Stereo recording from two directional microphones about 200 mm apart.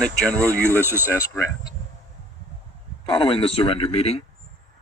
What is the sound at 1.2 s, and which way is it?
Speech, 15° left (ahead or behind).